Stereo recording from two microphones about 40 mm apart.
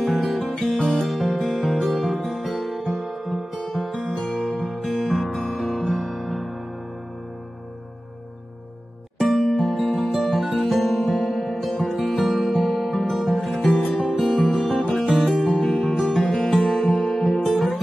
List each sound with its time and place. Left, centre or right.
0.1 s music: centre
0.6 s music: centre
1.0 s music: centre
4.1 s music: centre
4.5 s music: centre
9.6 s music: centre